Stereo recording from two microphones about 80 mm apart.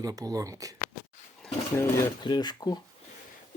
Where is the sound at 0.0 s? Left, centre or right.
Right.